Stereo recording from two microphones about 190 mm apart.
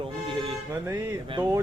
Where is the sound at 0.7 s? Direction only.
10° right (ahead or behind).